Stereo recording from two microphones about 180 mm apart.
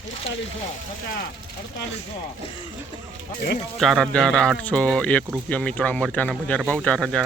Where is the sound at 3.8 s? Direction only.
Centre (ahead or behind).